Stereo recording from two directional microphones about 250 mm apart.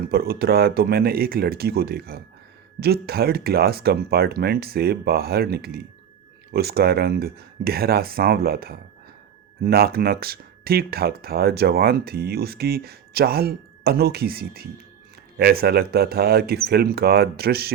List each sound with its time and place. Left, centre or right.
0.1 s speech: right